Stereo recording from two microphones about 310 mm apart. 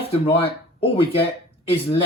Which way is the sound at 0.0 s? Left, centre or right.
Centre.